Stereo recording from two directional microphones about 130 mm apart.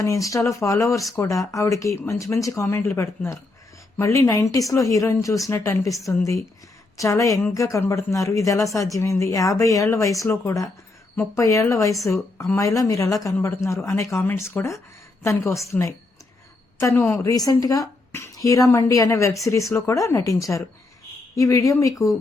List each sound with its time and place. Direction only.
0.0 s a woman's voice: 25° left (ahead or behind)
17.2 s speech: 25° left (ahead or behind)